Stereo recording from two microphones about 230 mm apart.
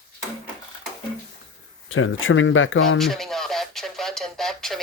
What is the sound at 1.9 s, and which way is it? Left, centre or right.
Speech, left.